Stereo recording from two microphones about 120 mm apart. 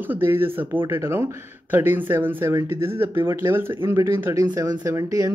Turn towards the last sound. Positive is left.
turn(degrees=-25)  # may be behind; listen again after turning